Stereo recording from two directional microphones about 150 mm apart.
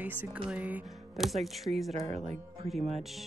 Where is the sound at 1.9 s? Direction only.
45° right (ahead or behind).